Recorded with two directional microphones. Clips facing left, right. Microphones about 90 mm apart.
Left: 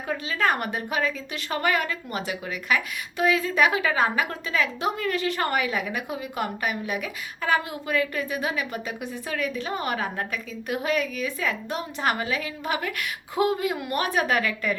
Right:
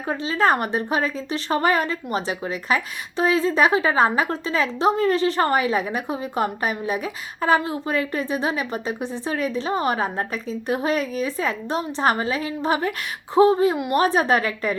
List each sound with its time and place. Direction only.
0.1 s a woman's voice: 30° right (ahead or behind)